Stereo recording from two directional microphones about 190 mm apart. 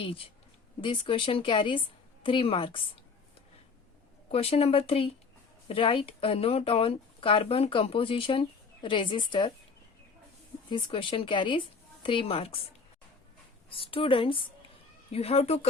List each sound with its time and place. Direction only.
0.8 s speech: 25° left (ahead or behind)
4.3 s speech: 30° left (ahead or behind)
10.7 s speech: 25° left (ahead or behind)
13.7 s speech: 30° left (ahead or behind)